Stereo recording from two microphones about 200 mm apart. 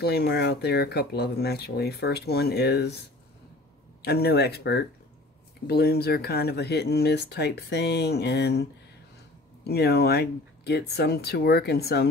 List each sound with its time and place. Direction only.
0.0 s speech: 55° left (ahead or behind)
4.0 s speech: 55° left (ahead or behind)
9.7 s speech: 55° left (ahead or behind)